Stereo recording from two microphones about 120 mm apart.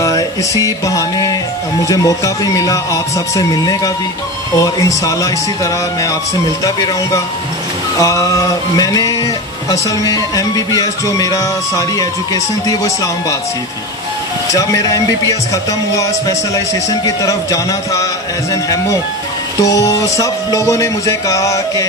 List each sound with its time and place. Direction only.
0.0 s music: 30° left (ahead or behind)
1.9 s speech: 30° left (ahead or behind)
14.5 s speech: 30° left (ahead or behind)